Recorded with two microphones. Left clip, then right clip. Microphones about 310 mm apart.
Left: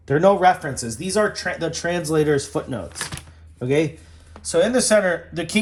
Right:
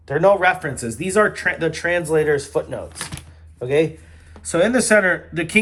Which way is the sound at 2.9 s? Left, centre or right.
Centre.